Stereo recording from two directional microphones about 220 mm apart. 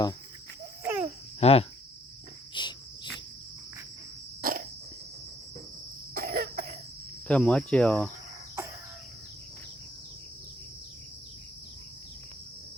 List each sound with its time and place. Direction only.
0.8 s a sound: 10° right (ahead or behind)
1.4 s cricket: 25° left (ahead or behind)
4.4 s cricket: 40° right (ahead or behind)
6.1 s cough: 45° right (ahead or behind)
7.3 s speech: 5° left (ahead or behind)